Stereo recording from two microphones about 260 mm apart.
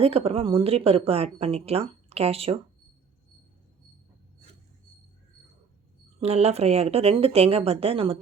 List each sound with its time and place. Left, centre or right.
0.0 s speech: right
6.1 s speech: right